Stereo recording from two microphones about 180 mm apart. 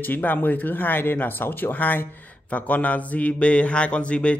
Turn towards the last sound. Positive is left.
turn(degrees=5)  # may be behind; listen again after turning